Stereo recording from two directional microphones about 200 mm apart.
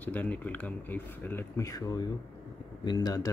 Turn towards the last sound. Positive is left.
turn(degrees=20)  # may be behind; listen again after turning